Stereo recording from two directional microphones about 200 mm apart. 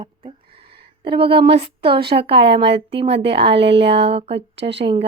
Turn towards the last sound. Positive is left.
turn(degrees=-25)  # may be behind; listen again after turning